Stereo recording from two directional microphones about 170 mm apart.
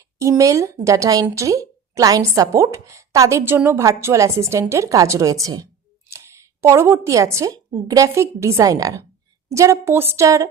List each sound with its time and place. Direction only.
0.2 s a woman's voice: 20° right (ahead or behind)